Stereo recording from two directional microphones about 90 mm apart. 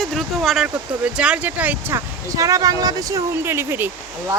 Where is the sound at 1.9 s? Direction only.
40° right (ahead or behind).